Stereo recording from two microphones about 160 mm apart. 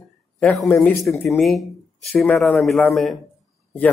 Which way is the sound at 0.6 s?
15° left (ahead or behind).